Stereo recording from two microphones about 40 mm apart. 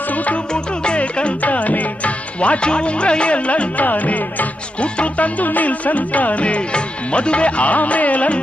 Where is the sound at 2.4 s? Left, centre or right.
Left.